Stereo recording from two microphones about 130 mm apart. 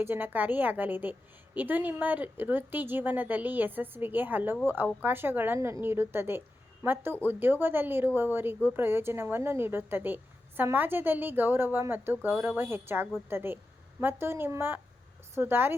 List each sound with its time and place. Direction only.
0.0 s speech: 15° right (ahead or behind)